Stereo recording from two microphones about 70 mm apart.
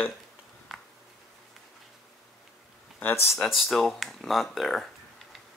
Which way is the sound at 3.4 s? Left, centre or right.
Centre.